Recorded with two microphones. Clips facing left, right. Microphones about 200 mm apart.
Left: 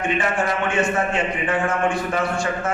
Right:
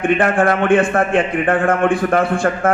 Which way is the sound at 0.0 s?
55° right (ahead or behind).